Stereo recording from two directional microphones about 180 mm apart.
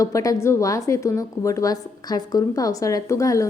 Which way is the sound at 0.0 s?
20° left (ahead or behind).